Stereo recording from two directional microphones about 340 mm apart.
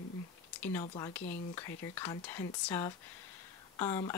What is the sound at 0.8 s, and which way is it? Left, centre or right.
Speech, centre.